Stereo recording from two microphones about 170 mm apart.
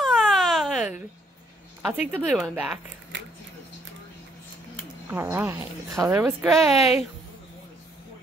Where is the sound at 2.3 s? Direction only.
5° right (ahead or behind).